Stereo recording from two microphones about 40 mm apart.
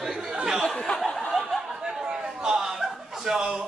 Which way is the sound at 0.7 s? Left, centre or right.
Centre.